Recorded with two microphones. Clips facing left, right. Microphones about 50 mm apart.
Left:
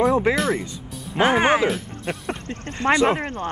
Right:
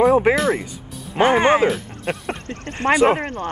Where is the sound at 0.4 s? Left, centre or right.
Centre.